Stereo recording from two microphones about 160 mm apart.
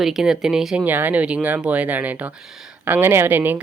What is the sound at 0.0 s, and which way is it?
Speech, 5° right (ahead or behind).